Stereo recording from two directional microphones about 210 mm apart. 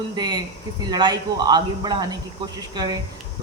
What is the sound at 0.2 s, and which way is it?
Speech, 20° right (ahead or behind).